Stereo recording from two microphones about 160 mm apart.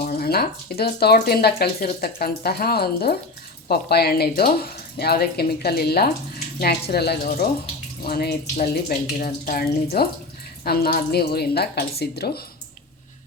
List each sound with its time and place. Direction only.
0.0 s speech: 65° left (ahead or behind); by 12.4 s 80° left